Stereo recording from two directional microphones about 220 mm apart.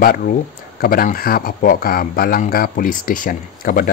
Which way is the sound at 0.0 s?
40° left (ahead or behind).